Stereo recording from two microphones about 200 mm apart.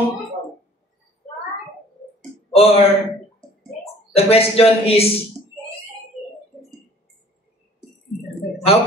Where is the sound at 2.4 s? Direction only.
30° left (ahead or behind).